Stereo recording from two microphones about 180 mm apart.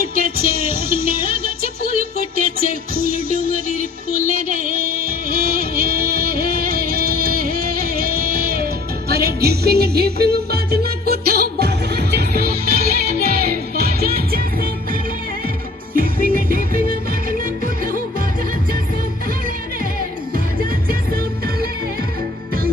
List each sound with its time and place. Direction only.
0.2 s music: 55° right (ahead or behind)
16.0 s music: 50° right (ahead or behind)
21.1 s music: 55° right (ahead or behind)